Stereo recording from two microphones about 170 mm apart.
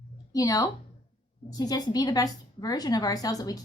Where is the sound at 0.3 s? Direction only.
20° left (ahead or behind).